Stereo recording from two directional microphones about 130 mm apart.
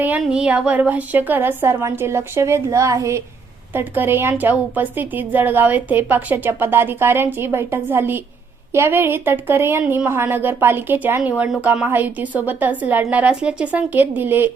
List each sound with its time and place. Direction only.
0.2 s a woman's voice: 5° right (ahead or behind)